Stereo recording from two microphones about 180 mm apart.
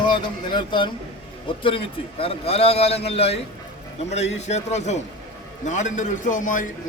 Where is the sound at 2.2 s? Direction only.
35° left (ahead or behind).